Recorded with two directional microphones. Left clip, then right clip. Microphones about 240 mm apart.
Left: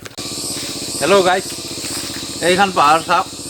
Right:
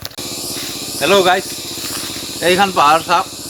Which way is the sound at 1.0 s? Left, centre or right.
Centre.